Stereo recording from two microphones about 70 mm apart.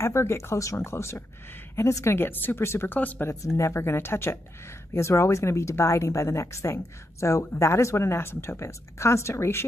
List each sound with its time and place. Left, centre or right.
0.0 s speech: left
3.0 s speech: left
3.3 s a woman's voice: left